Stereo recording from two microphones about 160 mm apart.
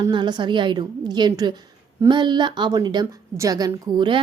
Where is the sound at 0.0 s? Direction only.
30° right (ahead or behind).